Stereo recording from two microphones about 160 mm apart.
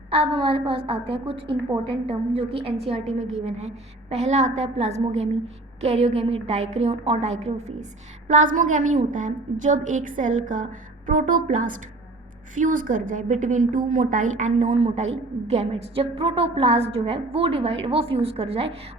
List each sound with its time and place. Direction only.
0.1 s a woman's voice: 35° right (ahead or behind)
8.3 s a woman's voice: 55° right (ahead or behind)